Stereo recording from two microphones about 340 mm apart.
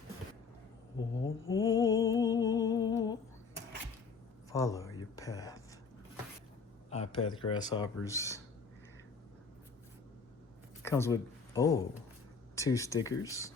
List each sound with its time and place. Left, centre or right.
1.2 s mantra: left
1.6 s humming: centre
4.5 s a sound: centre
6.9 s speech: centre
10.8 s speech: centre